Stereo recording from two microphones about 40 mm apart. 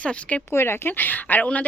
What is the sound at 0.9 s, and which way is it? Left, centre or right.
Speech, left.